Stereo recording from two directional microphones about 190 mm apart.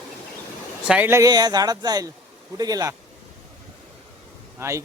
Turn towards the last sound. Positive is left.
turn(degrees=-15)  # may be behind; listen again after turning